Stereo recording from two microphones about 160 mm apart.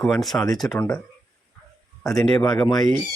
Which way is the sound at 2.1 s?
Centre (ahead or behind).